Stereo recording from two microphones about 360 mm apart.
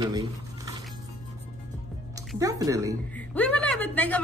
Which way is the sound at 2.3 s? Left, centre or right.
Centre.